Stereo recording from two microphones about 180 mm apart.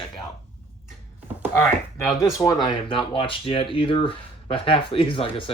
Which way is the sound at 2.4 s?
20° left (ahead or behind).